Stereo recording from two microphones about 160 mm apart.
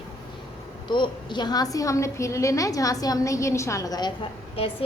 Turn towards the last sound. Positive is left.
turn(degrees=35)  # may be behind; listen again after turning